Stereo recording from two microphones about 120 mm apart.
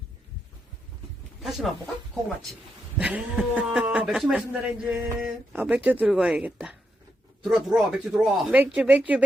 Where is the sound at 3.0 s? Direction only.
10° right (ahead or behind).